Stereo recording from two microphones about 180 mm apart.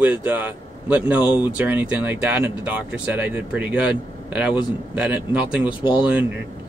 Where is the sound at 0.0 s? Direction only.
10° right (ahead or behind).